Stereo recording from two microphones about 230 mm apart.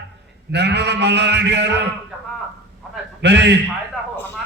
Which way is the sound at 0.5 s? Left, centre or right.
Right.